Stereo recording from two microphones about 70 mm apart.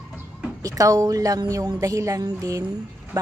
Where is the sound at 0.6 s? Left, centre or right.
Right.